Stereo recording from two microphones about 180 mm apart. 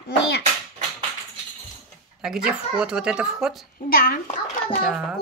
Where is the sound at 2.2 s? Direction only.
5° right (ahead or behind).